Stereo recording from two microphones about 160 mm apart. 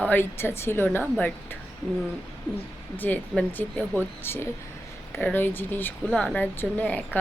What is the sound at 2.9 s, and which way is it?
Speech, 10° left (ahead or behind).